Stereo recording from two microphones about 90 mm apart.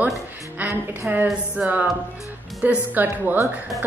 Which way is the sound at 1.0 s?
20° right (ahead or behind).